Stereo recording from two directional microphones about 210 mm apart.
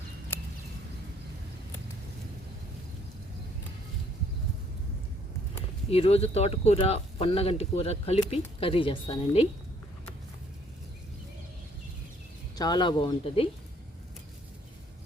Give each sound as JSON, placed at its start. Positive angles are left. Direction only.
{"t": 5.9, "sound": "speech", "side_deg": 30}
{"t": 12.5, "sound": "speech", "side_deg": 20}